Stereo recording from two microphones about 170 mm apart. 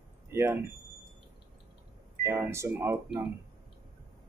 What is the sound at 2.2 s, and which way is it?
Speech, 15° right (ahead or behind).